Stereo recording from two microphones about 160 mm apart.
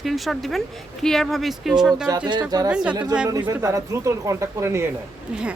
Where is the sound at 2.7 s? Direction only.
5° right (ahead or behind).